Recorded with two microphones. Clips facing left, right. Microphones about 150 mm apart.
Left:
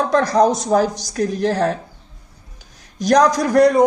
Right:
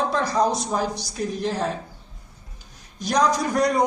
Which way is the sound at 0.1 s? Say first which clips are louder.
Left 7 dB; 85° left.